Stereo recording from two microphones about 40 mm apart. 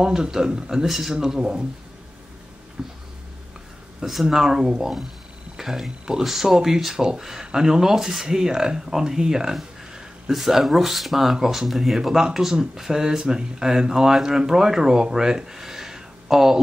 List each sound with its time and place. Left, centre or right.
0.0 s speech: centre
0.8 s speech: centre
2.8 s speech: centre
4.0 s speech: centre